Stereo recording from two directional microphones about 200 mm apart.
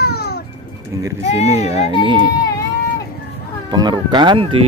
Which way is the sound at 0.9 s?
15° right (ahead or behind).